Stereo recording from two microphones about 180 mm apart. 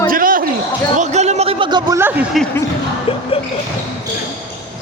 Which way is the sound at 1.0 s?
40° right (ahead or behind).